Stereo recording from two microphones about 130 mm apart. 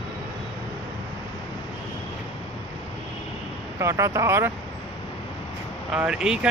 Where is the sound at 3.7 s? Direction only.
20° right (ahead or behind).